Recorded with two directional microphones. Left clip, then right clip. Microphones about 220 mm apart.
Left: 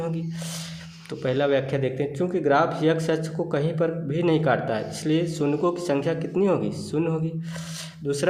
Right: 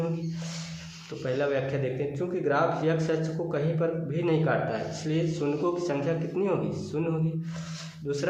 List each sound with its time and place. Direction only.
1.2 s speech: 45° left (ahead or behind)